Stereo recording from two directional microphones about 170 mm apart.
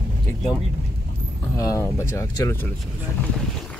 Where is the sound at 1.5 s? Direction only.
20° left (ahead or behind).